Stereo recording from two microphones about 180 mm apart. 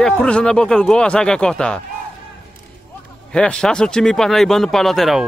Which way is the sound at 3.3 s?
5° left (ahead or behind).